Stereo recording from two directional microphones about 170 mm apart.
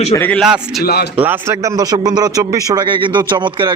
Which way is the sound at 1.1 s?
15° right (ahead or behind).